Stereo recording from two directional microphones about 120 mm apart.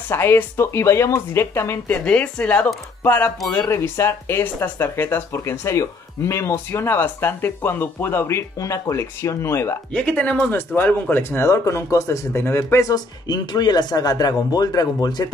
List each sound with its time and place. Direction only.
0.1 s speech: 20° left (ahead or behind)
2.0 s speech: 10° left (ahead or behind)
9.9 s speech: 10° left (ahead or behind); by 15.2 s 35° left (ahead or behind)